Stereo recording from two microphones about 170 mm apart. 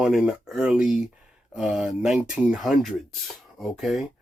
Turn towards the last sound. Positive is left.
turn(degrees=0)  # may be behind; listen again after turning